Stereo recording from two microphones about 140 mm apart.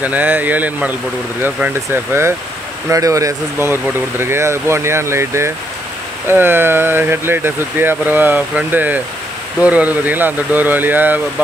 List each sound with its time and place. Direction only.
0.0 s speech: 10° right (ahead or behind)
2.9 s speech: 25° right (ahead or behind)